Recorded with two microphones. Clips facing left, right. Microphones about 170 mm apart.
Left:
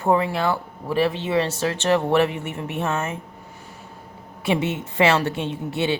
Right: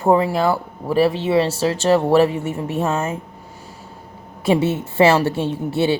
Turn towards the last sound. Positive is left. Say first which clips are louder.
# right 5 dB
turn(degrees=-35)  # may be behind; listen again after turning